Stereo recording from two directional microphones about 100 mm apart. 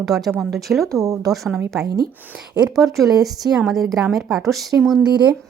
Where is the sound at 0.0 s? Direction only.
5° right (ahead or behind).